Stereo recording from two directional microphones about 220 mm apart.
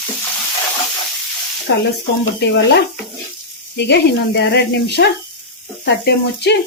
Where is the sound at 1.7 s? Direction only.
55° left (ahead or behind).